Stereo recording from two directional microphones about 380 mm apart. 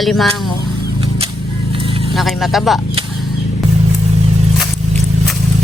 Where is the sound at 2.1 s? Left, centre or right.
Centre.